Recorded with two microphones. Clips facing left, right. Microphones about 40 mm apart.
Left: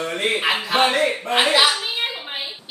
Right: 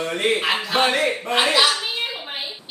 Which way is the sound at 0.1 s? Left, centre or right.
Centre.